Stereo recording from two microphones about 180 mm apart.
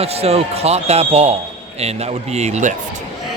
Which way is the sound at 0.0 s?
35° right (ahead or behind).